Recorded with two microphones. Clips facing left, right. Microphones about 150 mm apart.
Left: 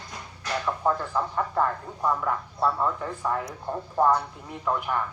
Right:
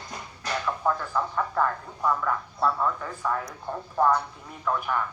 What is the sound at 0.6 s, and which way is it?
Speech, 20° left (ahead or behind).